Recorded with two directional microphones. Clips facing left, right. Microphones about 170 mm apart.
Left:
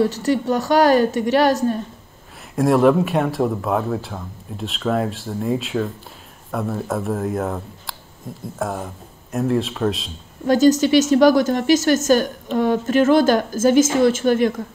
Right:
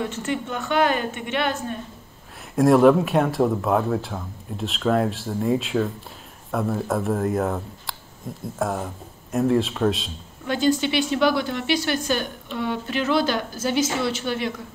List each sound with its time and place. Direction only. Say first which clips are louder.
0.0 s a woman's voice: left 8 dB; 35° left (ahead or behind)
2.5 s speech: even; centre (ahead or behind)
10.4 s a woman's voice: left 7 dB; 40° left (ahead or behind)